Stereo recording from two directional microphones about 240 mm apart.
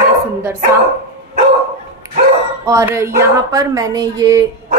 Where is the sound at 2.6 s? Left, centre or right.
Centre.